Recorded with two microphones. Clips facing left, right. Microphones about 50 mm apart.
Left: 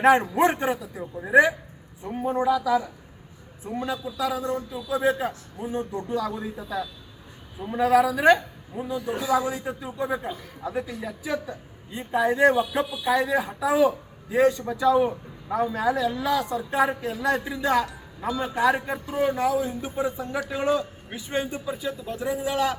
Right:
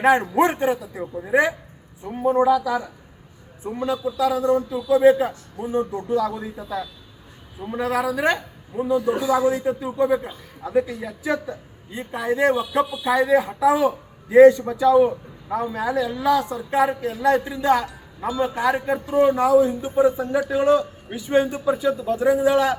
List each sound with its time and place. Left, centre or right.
0.0 s a man's voice: centre
3.6 s a man's voice: centre
19.5 s a man's voice: right
20.1 s a man's voice: centre